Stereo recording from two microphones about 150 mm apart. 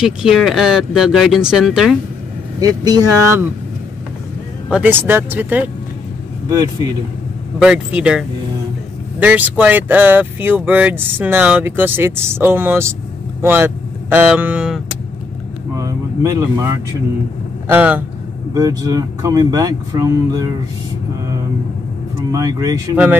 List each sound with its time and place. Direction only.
0.0 s speech: 5° right (ahead or behind)
2.6 s speech: 25° right (ahead or behind)
4.6 s speech: 10° right (ahead or behind)
7.5 s speech: 5° right (ahead or behind)
15.7 s speech: 20° right (ahead or behind)
17.6 s speech: 10° right (ahead or behind)
18.5 s speech: 25° right (ahead or behind)
22.3 s speech: 25° right (ahead or behind)